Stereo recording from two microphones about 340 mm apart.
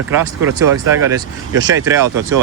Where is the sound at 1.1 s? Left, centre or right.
Centre.